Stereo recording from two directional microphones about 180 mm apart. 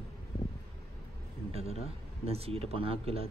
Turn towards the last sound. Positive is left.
turn(degrees=-30)  # may be behind; listen again after turning